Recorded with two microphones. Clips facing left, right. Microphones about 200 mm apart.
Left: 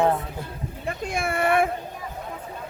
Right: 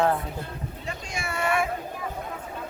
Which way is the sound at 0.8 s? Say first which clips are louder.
Left 9 dB; 55° left (ahead or behind).